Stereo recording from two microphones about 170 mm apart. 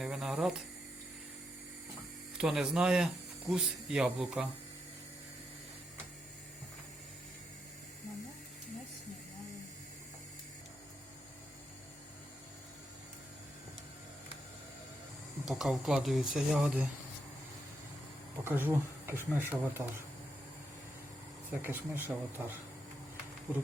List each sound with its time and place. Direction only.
0.0 s a sound: centre (ahead or behind)
2.4 s speech: 5° right (ahead or behind)
15.4 s speech: 5° right (ahead or behind)
18.4 s speech: 15° right (ahead or behind)
21.6 s speech: 10° right (ahead or behind)